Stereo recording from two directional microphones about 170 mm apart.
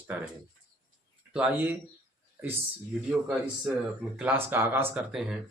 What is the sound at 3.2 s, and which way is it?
A man's voice, 5° right (ahead or behind).